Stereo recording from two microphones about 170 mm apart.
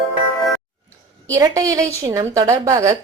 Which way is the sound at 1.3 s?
20° right (ahead or behind).